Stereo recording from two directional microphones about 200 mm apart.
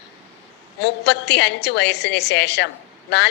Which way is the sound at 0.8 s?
60° left (ahead or behind).